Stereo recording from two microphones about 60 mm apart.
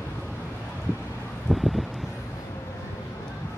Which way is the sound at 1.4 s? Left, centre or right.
Centre.